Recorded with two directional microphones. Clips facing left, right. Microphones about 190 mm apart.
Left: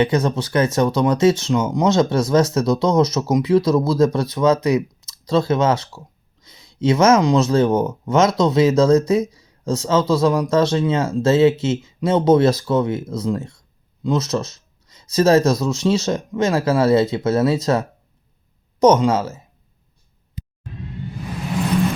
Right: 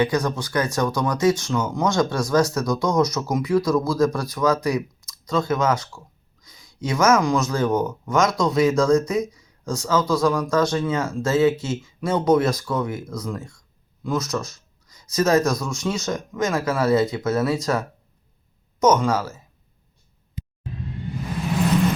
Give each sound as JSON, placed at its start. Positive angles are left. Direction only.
{"t": 0.0, "sound": "speech", "side_deg": 25}